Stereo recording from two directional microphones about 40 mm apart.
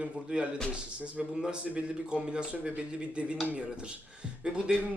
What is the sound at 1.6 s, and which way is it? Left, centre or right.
A man's voice, right.